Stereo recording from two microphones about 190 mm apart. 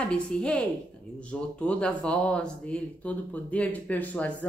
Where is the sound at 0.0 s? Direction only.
5° left (ahead or behind).